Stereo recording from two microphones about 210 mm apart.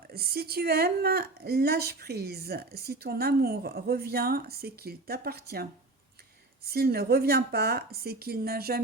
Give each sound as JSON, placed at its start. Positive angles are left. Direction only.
{"t": 0.1, "sound": "speech", "side_deg": -45}
{"t": 6.7, "sound": "speech", "side_deg": -45}